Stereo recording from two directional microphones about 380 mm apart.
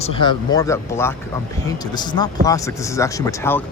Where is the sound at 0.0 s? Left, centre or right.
Centre.